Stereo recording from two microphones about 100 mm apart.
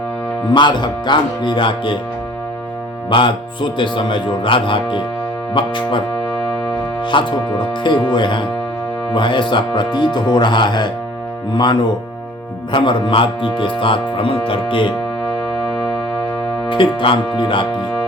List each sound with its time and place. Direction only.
0.5 s speech: 50° left (ahead or behind)
3.1 s speech: 55° left (ahead or behind)
7.0 s speech: 55° left (ahead or behind)
16.6 s speech: 55° left (ahead or behind)